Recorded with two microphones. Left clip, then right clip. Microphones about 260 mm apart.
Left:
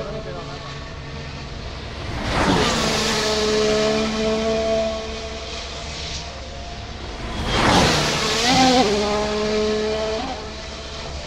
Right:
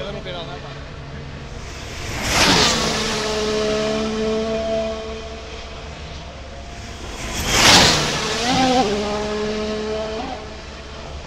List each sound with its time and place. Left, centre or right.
2.1 s a sound: right
2.8 s vehicle: centre
7.3 s whoosh: right
8.0 s vehicle: centre